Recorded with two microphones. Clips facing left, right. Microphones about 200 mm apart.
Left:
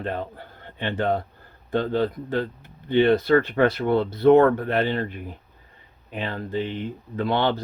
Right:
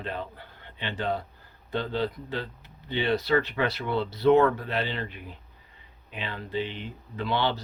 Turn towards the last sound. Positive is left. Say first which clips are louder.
# left 5 dB
turn(degrees=50)  # may be behind; listen again after turning